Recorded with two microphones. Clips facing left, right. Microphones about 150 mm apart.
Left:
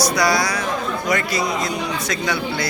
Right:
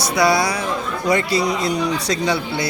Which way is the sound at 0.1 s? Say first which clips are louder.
Right 2 dB; 25° right (ahead or behind).